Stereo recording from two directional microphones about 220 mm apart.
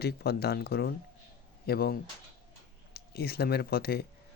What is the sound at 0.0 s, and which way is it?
Speech, 45° left (ahead or behind).